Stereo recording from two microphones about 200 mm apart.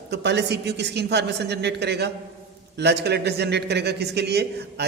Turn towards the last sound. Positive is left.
turn(degrees=-55)  # may be behind; listen again after turning